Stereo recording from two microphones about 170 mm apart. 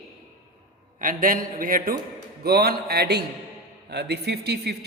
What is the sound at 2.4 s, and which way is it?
Speech, 70° right (ahead or behind).